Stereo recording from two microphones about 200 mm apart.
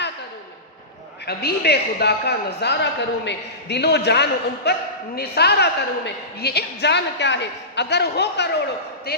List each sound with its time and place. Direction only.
1.2 s a man's voice: 50° left (ahead or behind)